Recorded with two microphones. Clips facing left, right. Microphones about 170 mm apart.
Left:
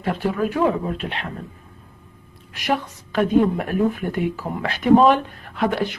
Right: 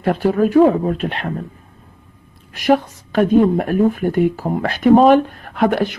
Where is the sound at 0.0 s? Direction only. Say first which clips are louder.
Right 7 dB; 45° right (ahead or behind).